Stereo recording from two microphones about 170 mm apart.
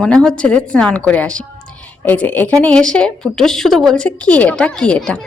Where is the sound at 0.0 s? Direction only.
5° left (ahead or behind).